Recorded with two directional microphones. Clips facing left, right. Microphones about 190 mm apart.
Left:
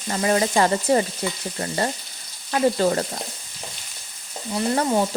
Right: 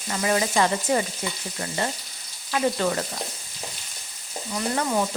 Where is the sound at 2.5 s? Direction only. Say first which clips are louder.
Left 4 dB; 35° left (ahead or behind).